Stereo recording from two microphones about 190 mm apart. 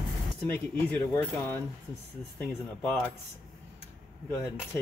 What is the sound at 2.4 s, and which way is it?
Speech, 5° left (ahead or behind).